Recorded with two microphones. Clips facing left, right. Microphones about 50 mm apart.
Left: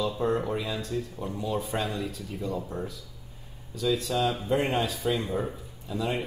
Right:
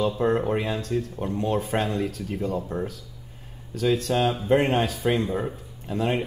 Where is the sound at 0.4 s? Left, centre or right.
Right.